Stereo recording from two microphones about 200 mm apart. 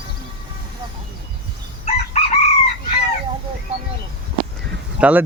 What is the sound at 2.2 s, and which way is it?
Chicken, 35° left (ahead or behind).